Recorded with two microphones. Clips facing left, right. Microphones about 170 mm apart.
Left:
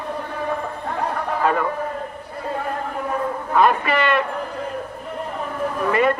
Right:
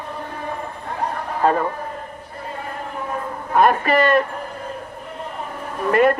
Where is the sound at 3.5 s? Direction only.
50° right (ahead or behind).